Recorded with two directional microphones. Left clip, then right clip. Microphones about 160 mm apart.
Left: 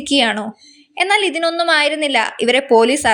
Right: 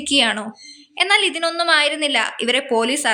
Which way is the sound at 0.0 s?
30° left (ahead or behind).